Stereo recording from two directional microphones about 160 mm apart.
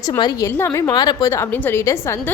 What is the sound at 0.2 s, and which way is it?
A woman's voice, 25° left (ahead or behind).